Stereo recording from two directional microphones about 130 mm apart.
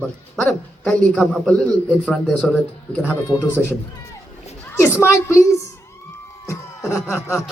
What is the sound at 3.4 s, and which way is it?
Speech, 20° left (ahead or behind).